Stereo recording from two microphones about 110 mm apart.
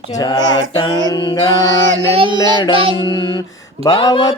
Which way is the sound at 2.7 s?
55° right (ahead or behind).